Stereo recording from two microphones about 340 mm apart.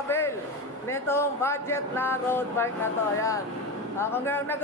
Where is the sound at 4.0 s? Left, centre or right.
Centre.